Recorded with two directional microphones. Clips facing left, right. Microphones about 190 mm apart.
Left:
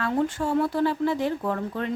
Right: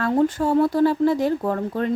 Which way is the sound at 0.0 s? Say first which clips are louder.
Right 5 dB; 40° right (ahead or behind).